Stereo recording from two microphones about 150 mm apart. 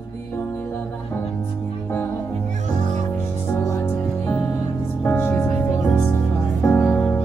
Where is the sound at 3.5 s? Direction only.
15° left (ahead or behind).